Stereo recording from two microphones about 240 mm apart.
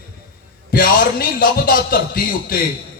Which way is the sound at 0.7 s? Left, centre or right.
Left.